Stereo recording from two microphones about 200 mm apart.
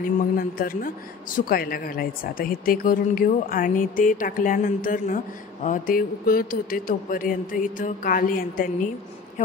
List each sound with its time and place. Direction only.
0.0 s speech: 45° left (ahead or behind)